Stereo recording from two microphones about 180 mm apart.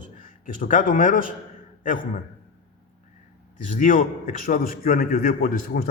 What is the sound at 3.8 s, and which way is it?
Speech, 45° left (ahead or behind).